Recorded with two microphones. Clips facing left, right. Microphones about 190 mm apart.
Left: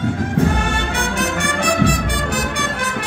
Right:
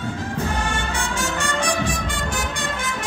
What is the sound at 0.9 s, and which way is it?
Music, 60° left (ahead or behind).